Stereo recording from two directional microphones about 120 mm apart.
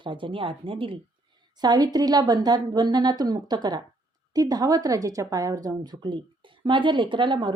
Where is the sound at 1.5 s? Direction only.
35° right (ahead or behind).